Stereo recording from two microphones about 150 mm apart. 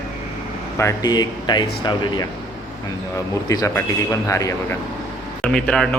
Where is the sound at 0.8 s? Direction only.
25° left (ahead or behind).